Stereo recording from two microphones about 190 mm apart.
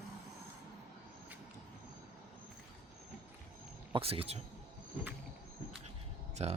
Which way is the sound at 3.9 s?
30° right (ahead or behind).